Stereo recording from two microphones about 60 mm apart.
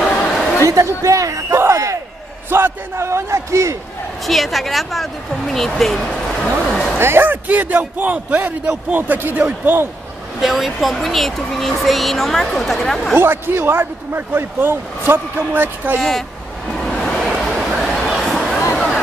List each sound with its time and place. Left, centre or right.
0.3 s a sound: centre
0.7 s speech: right
1.6 s crowd: right
2.5 s speech: right
3.1 s a man's voice: right
4.3 s speech: centre
6.7 s a sound: centre
7.0 s a man's voice: right
10.4 s speech: centre
13.2 s speech: right
16.0 s speech: centre
16.8 s vehicle: centre
17.4 s a sound: centre